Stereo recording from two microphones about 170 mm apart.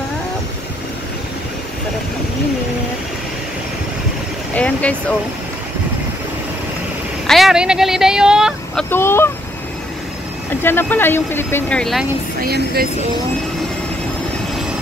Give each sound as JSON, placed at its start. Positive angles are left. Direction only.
{"t": 4.6, "sound": "speech", "side_deg": 10}
{"t": 7.2, "sound": "speech", "side_deg": 0}
{"t": 8.9, "sound": "speech", "side_deg": 15}
{"t": 10.6, "sound": "speech", "side_deg": 10}
{"t": 12.4, "sound": "speech", "side_deg": -65}